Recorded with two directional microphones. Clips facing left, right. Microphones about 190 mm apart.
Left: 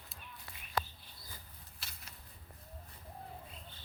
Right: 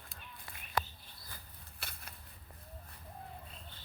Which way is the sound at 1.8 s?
60° right (ahead or behind).